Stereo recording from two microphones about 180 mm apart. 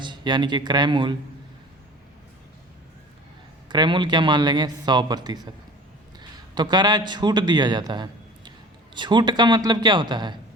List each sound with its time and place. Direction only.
0.0 s speech: 25° right (ahead or behind)
3.7 s a man's voice: 25° right (ahead or behind)